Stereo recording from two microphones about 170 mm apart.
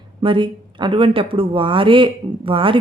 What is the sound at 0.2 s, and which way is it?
Speech, 30° right (ahead or behind).